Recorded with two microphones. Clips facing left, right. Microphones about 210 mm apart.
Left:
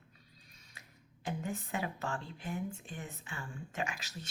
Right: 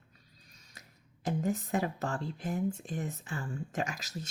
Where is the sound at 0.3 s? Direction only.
40° right (ahead or behind).